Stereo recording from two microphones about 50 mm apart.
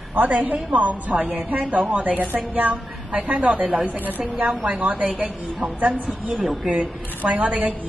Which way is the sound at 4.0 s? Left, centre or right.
Right.